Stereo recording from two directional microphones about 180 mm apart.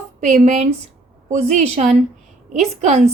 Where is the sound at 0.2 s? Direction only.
40° right (ahead or behind).